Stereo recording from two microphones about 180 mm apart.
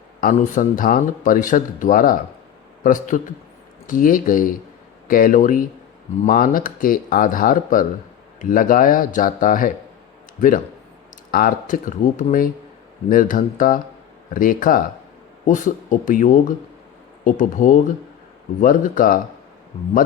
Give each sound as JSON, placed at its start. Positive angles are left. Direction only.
{"t": 0.2, "sound": "speech", "side_deg": 50}
{"t": 11.3, "sound": "speech", "side_deg": 50}